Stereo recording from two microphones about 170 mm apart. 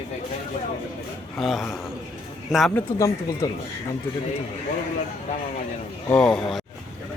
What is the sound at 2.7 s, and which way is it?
Speech, 15° left (ahead or behind).